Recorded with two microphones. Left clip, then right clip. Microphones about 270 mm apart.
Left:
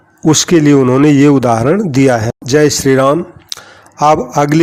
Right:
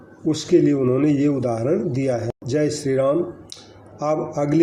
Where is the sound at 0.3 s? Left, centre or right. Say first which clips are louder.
Left 9 dB; left.